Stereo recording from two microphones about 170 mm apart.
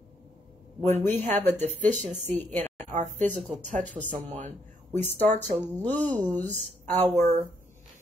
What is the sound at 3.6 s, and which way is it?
Speech, 45° right (ahead or behind).